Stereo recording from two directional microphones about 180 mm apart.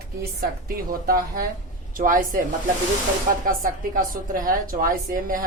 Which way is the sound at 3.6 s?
50° right (ahead or behind).